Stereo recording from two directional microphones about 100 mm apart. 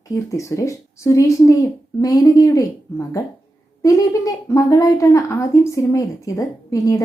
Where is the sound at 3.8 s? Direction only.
35° left (ahead or behind).